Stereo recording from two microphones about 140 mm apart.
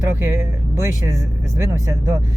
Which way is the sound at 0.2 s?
15° right (ahead or behind).